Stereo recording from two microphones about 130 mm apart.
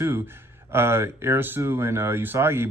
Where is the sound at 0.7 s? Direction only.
20° right (ahead or behind).